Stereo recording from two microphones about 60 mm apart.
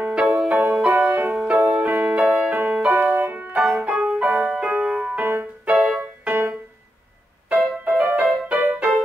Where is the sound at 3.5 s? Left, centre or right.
Centre.